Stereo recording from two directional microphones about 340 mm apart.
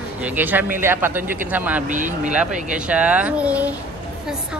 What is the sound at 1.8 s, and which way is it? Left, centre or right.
Speech, right.